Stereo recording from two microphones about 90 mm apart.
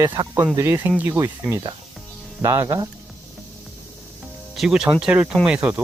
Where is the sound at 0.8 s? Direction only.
20° right (ahead or behind).